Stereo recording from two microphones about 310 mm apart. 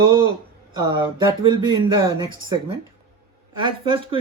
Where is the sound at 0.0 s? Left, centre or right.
Centre.